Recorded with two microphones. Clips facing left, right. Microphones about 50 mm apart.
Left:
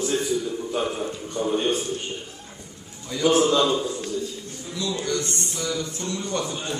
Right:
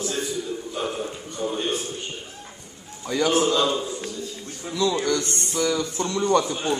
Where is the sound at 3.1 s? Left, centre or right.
Right.